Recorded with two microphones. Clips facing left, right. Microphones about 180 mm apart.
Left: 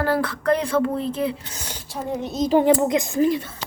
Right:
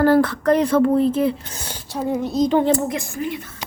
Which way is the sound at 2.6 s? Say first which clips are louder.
Left 2 dB; 20° left (ahead or behind).